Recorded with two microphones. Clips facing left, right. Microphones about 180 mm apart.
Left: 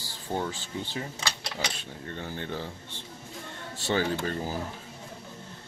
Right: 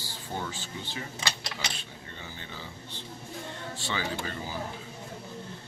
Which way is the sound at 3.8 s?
45° left (ahead or behind).